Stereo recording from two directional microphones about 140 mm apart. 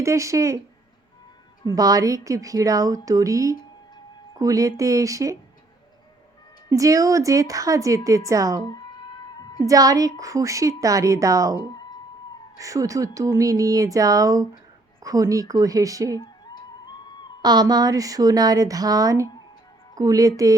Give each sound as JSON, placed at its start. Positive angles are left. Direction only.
{"t": 0.0, "sound": "a woman's voice", "side_deg": -20}
{"t": 1.6, "sound": "a woman's voice", "side_deg": -25}
{"t": 6.7, "sound": "a woman's voice", "side_deg": -25}
{"t": 9.6, "sound": "a woman's voice", "side_deg": -25}
{"t": 16.1, "sound": "music", "side_deg": 30}
{"t": 17.4, "sound": "a woman's voice", "side_deg": -30}